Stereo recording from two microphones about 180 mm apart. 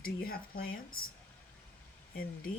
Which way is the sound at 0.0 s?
55° left (ahead or behind).